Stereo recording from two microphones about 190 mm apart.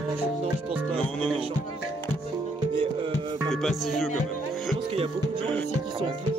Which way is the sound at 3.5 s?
Centre (ahead or behind).